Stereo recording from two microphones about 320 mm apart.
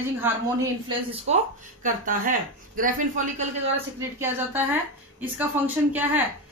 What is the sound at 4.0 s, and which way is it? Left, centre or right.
Speech, centre.